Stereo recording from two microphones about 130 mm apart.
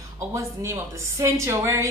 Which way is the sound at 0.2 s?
25° right (ahead or behind).